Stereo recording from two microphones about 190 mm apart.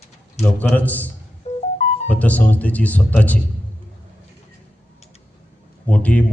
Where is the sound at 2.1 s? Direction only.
10° left (ahead or behind).